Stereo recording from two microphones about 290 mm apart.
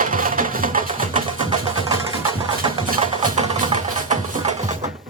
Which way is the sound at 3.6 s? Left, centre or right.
Right.